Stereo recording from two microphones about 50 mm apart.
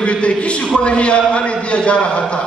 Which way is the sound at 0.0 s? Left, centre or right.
Left.